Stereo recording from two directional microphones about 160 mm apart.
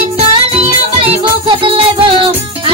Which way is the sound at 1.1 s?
35° right (ahead or behind).